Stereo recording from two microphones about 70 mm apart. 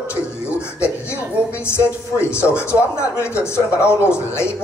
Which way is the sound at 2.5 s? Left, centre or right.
Left.